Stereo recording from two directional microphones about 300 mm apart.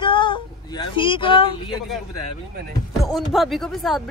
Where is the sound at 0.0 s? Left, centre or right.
Centre.